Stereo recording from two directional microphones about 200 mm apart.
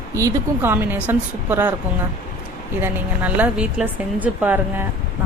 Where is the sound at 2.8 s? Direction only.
10° right (ahead or behind).